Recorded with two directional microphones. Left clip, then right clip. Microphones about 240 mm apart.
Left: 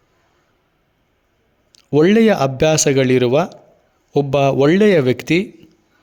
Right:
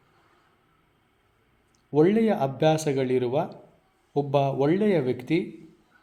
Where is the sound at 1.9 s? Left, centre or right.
Left.